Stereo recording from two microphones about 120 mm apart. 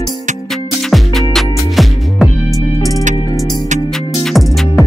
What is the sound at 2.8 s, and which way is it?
Music, 30° left (ahead or behind).